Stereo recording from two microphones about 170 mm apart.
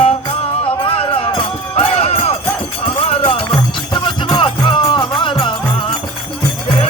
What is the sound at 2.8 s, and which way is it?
Music, 35° left (ahead or behind).